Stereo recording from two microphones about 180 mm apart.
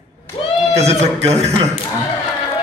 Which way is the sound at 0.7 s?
35° right (ahead or behind).